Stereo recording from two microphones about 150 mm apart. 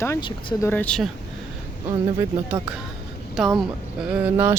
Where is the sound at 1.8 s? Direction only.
15° right (ahead or behind).